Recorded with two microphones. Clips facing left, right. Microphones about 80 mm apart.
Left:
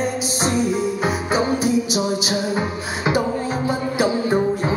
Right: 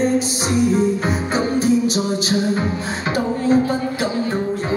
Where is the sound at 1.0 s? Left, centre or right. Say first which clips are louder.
Even; centre.